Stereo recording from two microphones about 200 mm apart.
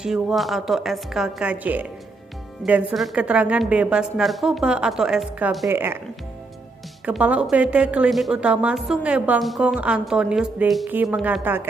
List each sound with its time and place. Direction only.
0.0 s a woman's voice: 5° right (ahead or behind)
5.7 s speech: 10° right (ahead or behind)
7.1 s a woman's voice: 5° right (ahead or behind)